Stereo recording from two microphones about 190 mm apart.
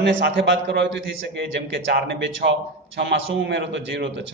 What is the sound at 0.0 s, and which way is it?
A man's voice, 65° right (ahead or behind).